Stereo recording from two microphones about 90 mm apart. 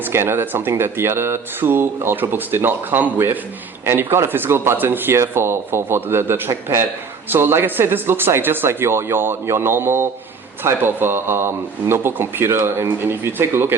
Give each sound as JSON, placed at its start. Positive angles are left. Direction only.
{"t": 0.0, "sound": "speech", "side_deg": -25}